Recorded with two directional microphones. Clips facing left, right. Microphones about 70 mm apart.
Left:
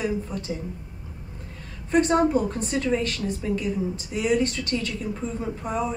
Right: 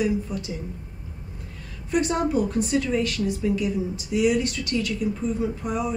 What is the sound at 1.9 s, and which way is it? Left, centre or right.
Speech, left.